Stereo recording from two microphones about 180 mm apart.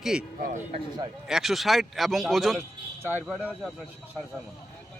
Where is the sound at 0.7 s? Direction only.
25° right (ahead or behind).